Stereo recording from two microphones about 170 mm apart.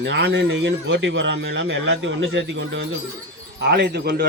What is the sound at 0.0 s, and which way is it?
Speech, 90° right.